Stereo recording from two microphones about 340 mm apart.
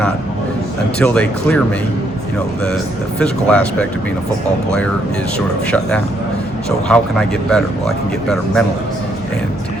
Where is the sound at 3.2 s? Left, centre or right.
Centre.